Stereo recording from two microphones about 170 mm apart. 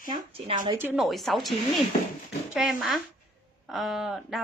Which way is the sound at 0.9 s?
Centre (ahead or behind).